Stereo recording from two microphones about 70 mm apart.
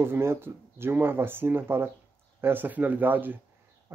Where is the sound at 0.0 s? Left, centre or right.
Right.